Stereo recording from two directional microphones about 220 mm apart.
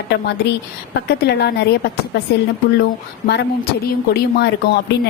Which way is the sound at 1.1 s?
50° left (ahead or behind).